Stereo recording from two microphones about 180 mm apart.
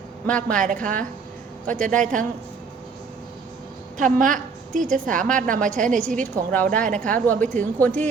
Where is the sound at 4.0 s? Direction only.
45° right (ahead or behind).